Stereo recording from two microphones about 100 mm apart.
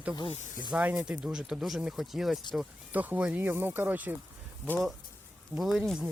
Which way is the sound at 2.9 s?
15° right (ahead or behind).